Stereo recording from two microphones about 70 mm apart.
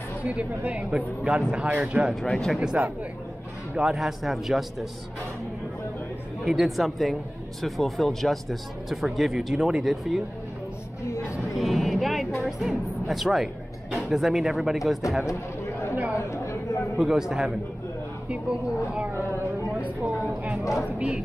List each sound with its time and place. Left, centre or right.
0.2 s a woman's voice: centre
2.2 s speech: centre
2.6 s speech: centre
6.4 s speech: centre
11.5 s a sound: centre
12.4 s speech: centre
16.2 s a sound: left
17.0 s speech: centre
20.6 s speech: left